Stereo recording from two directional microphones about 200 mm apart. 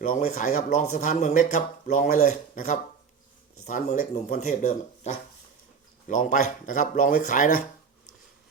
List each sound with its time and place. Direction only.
0.0 s speech: 45° left (ahead or behind)